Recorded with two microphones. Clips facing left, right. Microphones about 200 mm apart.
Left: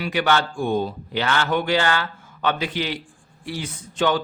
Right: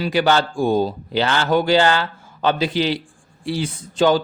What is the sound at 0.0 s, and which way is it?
Speech, 30° right (ahead or behind).